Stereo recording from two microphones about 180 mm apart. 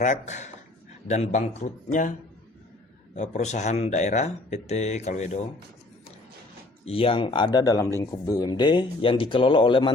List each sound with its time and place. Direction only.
0.0 s speech: 40° left (ahead or behind)
3.2 s speech: 40° left (ahead or behind)
6.8 s speech: 30° left (ahead or behind)